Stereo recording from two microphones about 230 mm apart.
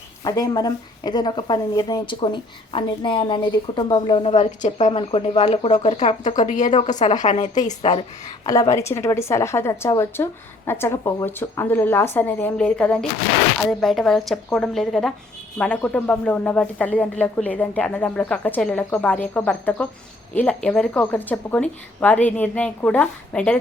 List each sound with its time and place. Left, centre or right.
0.3 s speech: centre
8.4 s speech: centre